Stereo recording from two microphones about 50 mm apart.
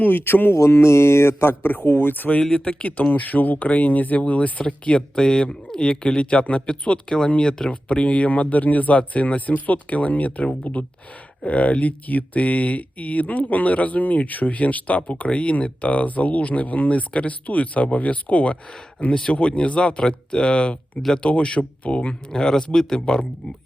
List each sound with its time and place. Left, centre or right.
0.0 s speech: left
0.8 s speech: left
2.4 s speech: left
4.6 s speech: centre